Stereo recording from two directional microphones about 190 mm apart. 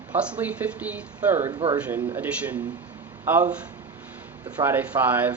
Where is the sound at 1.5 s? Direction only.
25° right (ahead or behind).